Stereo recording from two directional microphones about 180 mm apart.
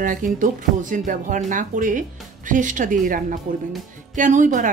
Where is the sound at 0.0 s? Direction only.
50° right (ahead or behind).